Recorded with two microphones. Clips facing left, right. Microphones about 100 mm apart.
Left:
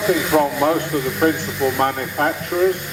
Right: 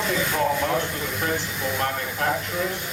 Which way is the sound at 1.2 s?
55° left (ahead or behind).